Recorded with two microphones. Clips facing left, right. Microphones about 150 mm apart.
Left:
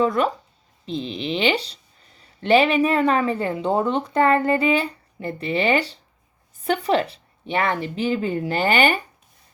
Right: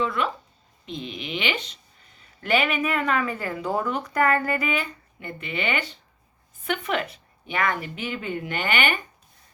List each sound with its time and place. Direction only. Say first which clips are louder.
0.0 s a woman's voice: left 6 dB; 40° left (ahead or behind)